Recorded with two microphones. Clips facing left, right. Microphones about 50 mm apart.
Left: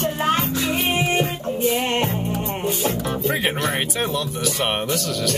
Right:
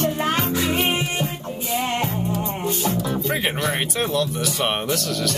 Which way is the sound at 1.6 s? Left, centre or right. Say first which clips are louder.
Left 3 dB; left.